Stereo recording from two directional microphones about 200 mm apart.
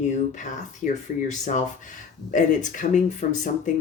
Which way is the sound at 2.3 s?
40° left (ahead or behind).